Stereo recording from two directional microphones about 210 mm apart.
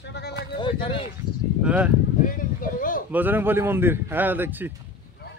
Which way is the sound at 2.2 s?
40° left (ahead or behind).